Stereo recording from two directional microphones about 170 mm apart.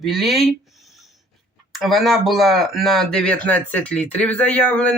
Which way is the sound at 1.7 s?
Centre (ahead or behind).